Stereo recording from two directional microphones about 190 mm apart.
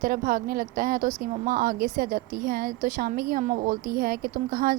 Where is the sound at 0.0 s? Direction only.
50° right (ahead or behind).